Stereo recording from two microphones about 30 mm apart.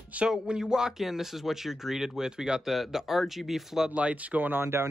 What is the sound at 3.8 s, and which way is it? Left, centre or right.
Speech, right.